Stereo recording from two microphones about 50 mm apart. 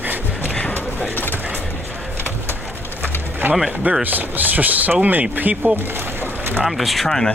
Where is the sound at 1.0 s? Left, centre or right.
Left.